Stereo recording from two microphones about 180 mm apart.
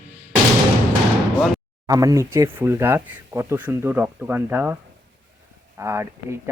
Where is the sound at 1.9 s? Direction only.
20° right (ahead or behind).